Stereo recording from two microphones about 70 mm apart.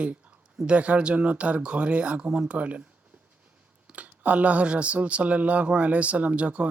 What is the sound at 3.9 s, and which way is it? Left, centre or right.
Speech, right.